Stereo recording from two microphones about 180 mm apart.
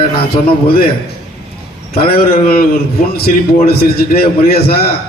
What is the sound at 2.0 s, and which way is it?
Speech, 55° left (ahead or behind).